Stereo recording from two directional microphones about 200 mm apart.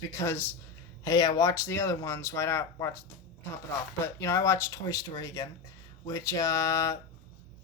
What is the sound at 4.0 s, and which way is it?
Speech, 15° left (ahead or behind).